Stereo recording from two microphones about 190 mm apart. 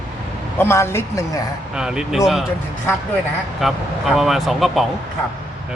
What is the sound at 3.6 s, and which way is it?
Speech, centre (ahead or behind).